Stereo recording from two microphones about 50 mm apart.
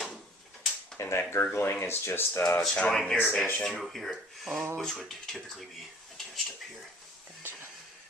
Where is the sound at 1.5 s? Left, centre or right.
Left.